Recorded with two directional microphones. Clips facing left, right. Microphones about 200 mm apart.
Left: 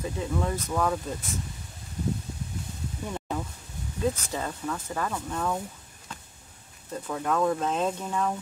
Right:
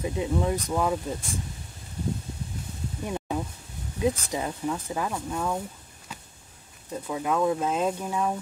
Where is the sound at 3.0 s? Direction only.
15° right (ahead or behind).